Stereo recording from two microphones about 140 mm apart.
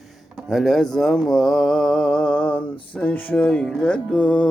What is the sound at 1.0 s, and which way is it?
Mantra, centre (ahead or behind).